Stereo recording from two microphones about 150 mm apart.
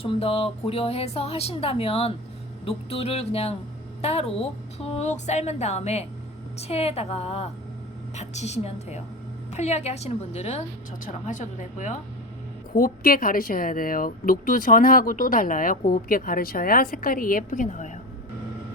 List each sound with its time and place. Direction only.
0.0 s a woman's voice: 40° left (ahead or behind)
11.0 s speech: 55° left (ahead or behind)
12.7 s speech: 75° left (ahead or behind); by 17.9 s 55° left (ahead or behind)